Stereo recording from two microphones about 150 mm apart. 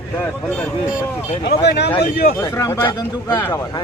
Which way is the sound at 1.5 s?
90° left.